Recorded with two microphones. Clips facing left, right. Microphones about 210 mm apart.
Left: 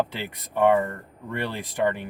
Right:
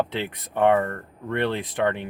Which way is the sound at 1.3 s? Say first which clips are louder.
Right 5 dB; 65° right (ahead or behind).